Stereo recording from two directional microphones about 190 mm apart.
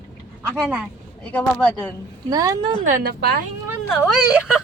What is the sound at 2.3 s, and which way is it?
Speech, 20° right (ahead or behind).